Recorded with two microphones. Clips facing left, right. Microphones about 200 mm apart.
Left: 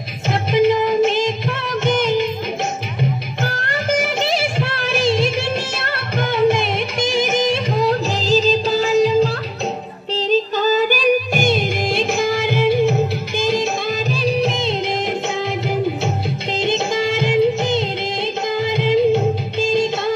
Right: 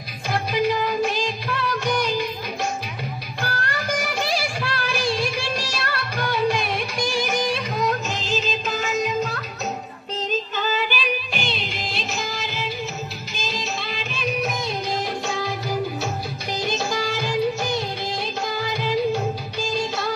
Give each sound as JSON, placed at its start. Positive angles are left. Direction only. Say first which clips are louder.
{"t": 0.3, "sound": "music of bollywood", "louder": "left 7 dB", "side_deg": 25}
{"t": 1.9, "sound": "music", "louder": "left 8 dB", "side_deg": 25}
{"t": 14.1, "sound": "music", "louder": "left 5 dB", "side_deg": 30}
{"t": 16.5, "sound": "music of bollywood", "louder": "left 6 dB", "side_deg": 25}